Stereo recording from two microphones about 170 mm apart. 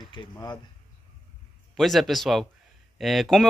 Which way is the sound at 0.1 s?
25° left (ahead or behind).